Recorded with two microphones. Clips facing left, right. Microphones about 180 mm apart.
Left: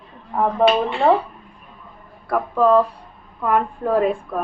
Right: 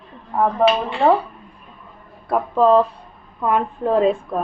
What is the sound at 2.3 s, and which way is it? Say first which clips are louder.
A woman's voice: right 1 dB; 25° right (ahead or behind).